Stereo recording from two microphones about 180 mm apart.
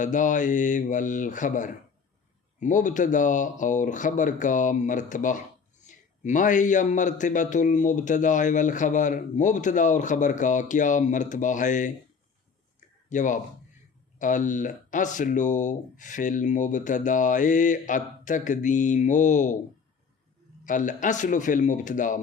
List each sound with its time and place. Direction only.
0.0 s a man's voice: 45° left (ahead or behind)
13.1 s a man's voice: 45° left (ahead or behind)
20.7 s a man's voice: 45° left (ahead or behind)